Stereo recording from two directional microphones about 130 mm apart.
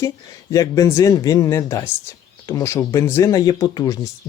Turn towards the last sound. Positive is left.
turn(degrees=25)  # may be behind; listen again after turning